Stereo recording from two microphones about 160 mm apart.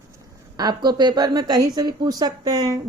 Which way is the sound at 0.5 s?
25° right (ahead or behind).